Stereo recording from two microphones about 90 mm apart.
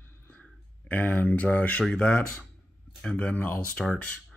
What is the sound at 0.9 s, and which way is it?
Speech, 20° left (ahead or behind).